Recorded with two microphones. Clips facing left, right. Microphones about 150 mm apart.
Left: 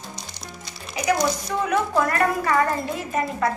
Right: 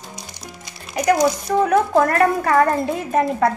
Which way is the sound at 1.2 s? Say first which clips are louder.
Right 6 dB; 45° right (ahead or behind).